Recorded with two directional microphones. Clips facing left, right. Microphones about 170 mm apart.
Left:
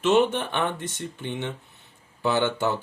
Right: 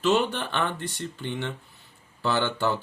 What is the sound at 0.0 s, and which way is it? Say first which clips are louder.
Speech: left 3 dB; 20° left (ahead or behind).